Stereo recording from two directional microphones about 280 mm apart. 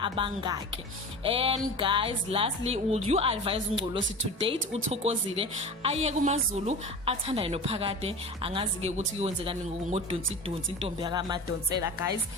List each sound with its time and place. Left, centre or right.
0.0 s a woman's voice: centre